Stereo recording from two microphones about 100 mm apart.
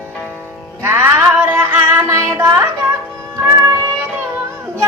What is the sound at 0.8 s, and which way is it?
Music, 25° right (ahead or behind).